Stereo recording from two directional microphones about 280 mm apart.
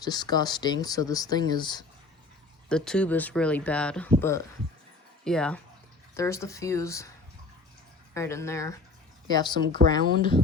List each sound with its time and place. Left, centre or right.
0.0 s speech: centre
2.6 s speech: centre
8.1 s speech: centre